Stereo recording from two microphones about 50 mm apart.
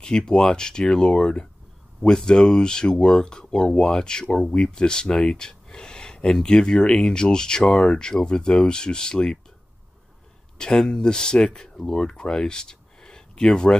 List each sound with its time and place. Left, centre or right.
0.0 s speech: centre
10.6 s speech: centre